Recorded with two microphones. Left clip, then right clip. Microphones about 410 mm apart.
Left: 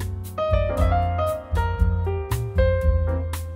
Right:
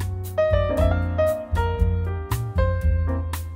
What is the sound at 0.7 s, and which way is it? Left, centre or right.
Music, centre.